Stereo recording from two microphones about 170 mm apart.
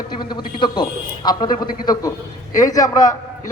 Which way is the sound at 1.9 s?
20° left (ahead or behind).